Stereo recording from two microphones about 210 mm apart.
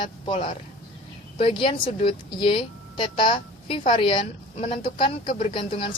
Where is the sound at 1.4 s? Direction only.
25° left (ahead or behind).